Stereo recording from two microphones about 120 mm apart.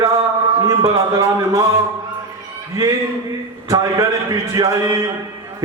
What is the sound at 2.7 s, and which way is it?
A man's voice, 25° right (ahead or behind).